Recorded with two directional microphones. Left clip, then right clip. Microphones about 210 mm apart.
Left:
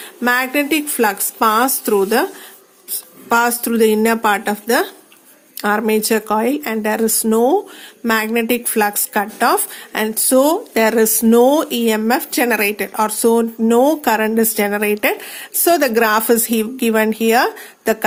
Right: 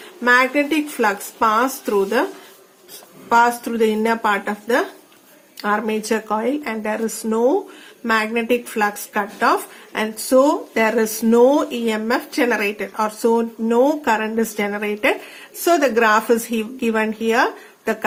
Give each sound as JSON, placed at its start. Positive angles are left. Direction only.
{"t": 0.2, "sound": "speech", "side_deg": 45}
{"t": 3.2, "sound": "speech", "side_deg": 50}